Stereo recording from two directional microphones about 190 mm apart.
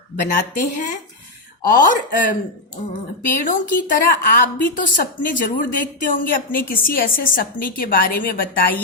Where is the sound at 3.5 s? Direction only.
45° left (ahead or behind).